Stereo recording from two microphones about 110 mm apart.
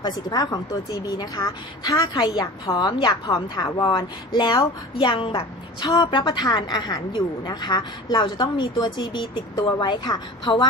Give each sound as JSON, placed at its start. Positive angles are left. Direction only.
{"t": 0.0, "sound": "a woman's voice", "side_deg": 35}
{"t": 5.8, "sound": "a woman's voice", "side_deg": 40}